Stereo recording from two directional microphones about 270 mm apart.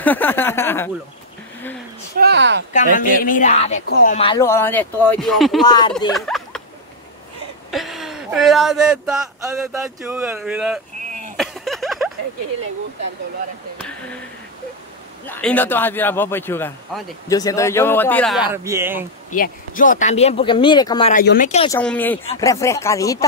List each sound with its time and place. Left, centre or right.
0.0 s speech: centre
2.1 s a sound: right
2.7 s a man's voice: left; by 5.6 s centre
5.7 s a man's voice: centre
6.1 s a sound: centre
7.7 s speech: centre
11.1 s a sound: right
11.3 s a sound: centre
15.2 s a man's voice: centre
18.5 s speech: centre
19.3 s speech: left
21.1 s speech: left
21.6 s a man's voice: centre